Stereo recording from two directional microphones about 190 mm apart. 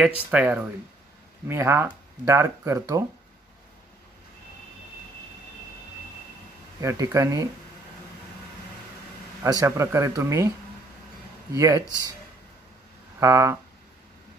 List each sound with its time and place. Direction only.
0.0 s speech: 10° right (ahead or behind)
6.8 s speech: 15° right (ahead or behind)
9.4 s speech: 15° right (ahead or behind)
11.5 s speech: 15° right (ahead or behind)
13.2 s speech: 15° right (ahead or behind)